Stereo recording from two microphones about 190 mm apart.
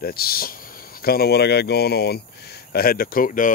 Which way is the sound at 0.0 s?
50° left (ahead or behind).